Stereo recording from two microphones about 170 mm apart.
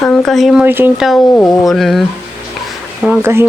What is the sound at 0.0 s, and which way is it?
Speech, 5° left (ahead or behind).